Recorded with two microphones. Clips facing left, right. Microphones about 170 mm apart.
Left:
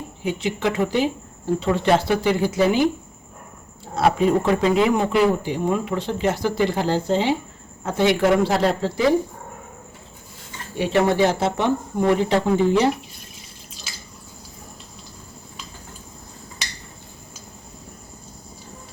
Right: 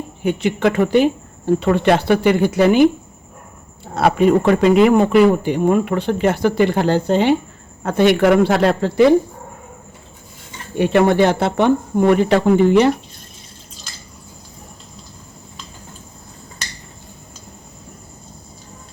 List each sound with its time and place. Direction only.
0.2 s speech: 60° right (ahead or behind)
3.9 s speech: 65° right (ahead or behind)
10.8 s speech: 55° right (ahead or behind)